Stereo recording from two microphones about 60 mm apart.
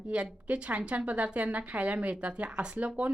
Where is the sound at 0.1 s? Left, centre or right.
Right.